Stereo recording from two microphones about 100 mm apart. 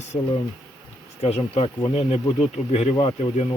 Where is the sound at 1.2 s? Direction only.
80° left.